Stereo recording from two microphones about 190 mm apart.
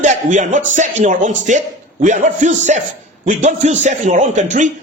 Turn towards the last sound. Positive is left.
turn(degrees=-40)  # may be behind; listen again after turning